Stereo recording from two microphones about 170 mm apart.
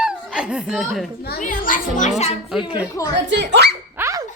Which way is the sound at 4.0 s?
20° right (ahead or behind).